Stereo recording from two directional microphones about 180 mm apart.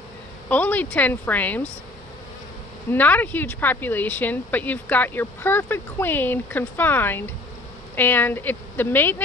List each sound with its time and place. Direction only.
0.5 s speech: 10° left (ahead or behind)
2.9 s speech: 10° left (ahead or behind)